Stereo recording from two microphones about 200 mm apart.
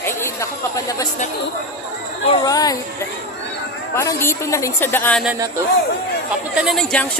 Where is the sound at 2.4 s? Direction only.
20° left (ahead or behind).